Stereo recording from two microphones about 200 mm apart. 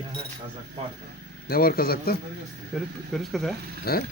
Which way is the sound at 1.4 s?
50° left (ahead or behind).